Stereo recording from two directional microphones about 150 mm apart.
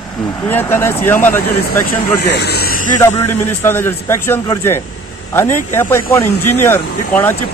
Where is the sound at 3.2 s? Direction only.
15° left (ahead or behind).